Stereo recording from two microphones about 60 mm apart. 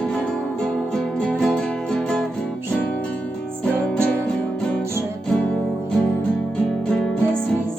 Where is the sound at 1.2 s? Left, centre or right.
Centre.